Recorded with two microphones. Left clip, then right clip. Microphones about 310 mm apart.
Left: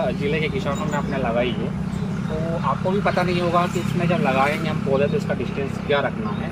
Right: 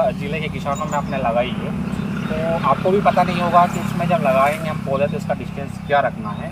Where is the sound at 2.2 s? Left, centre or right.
Right.